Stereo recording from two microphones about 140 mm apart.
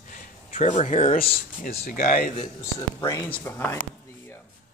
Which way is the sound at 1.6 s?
80° left.